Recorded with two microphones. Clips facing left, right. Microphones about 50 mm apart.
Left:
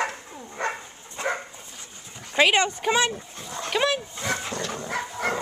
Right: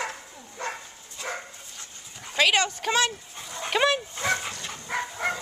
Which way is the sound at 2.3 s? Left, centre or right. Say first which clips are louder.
Left 3 dB; left.